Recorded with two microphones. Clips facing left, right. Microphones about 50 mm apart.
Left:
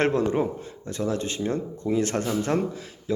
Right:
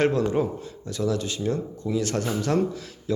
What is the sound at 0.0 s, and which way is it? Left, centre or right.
Speech, left.